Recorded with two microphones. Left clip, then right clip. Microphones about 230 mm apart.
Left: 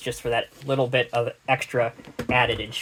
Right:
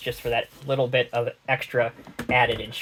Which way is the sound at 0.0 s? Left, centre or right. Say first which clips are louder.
Even; left.